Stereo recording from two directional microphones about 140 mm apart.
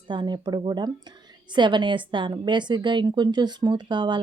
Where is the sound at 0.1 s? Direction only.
35° right (ahead or behind).